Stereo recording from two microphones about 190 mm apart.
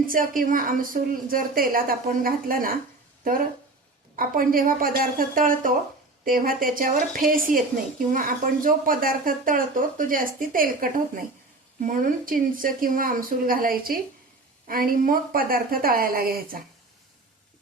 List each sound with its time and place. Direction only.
0.0 s a woman's voice: 45° right (ahead or behind)
4.1 s a woman's voice: 50° right (ahead or behind)